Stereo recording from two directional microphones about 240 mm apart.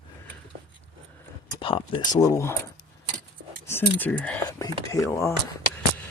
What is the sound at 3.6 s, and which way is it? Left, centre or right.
Speech, centre.